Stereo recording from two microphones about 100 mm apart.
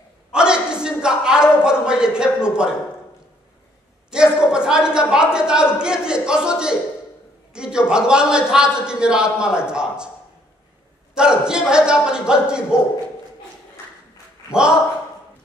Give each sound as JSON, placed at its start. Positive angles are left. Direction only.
{"t": 0.3, "sound": "a sound", "side_deg": -10}
{"t": 1.5, "sound": "a man's voice", "side_deg": -10}
{"t": 4.1, "sound": "a man's voice", "side_deg": -10}
{"t": 11.1, "sound": "a man's voice", "side_deg": -10}
{"t": 14.5, "sound": "speech", "side_deg": -10}